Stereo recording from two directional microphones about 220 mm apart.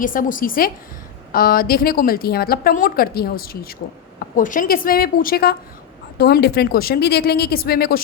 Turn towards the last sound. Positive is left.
turn(degrees=45)  # may be behind; listen again after turning